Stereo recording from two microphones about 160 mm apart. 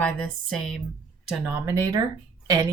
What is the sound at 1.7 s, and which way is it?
Speech, 20° right (ahead or behind).